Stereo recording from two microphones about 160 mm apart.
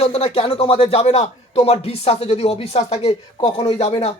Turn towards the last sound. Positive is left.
turn(degrees=40)  # may be behind; listen again after turning